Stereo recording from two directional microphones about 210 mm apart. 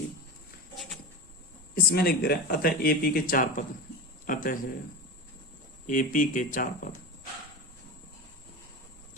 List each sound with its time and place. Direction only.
1.7 s a man's voice: 45° left (ahead or behind)
5.8 s speech: 40° left (ahead or behind)